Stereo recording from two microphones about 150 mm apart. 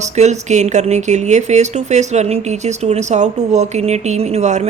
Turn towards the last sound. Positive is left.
turn(degrees=-50)  # may be behind; listen again after turning